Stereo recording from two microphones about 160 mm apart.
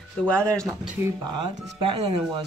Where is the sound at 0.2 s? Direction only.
5° left (ahead or behind).